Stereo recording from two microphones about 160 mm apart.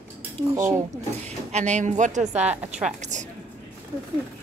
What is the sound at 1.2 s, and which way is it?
A woman's voice, 45° right (ahead or behind).